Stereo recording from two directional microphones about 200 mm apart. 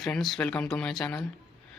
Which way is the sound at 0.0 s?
Centre (ahead or behind).